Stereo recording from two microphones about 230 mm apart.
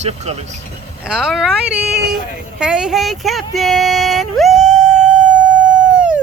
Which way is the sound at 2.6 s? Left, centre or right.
Centre.